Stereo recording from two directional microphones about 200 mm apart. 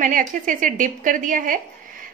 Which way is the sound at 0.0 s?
40° right (ahead or behind).